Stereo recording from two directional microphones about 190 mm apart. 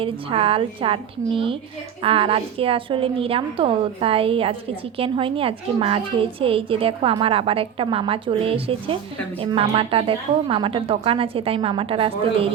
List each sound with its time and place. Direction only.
0.0 s a woman's voice: 30° right (ahead or behind)